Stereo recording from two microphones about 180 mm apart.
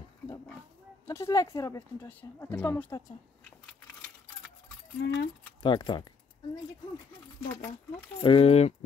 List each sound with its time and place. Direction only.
1.0 s speech: 15° left (ahead or behind)
5.0 s speech: 90° left
5.6 s speech: 25° left (ahead or behind)
8.2 s speech: 30° left (ahead or behind)